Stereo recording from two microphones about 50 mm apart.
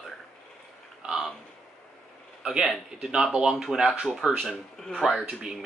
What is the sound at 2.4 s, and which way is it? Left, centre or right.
A man's voice, centre.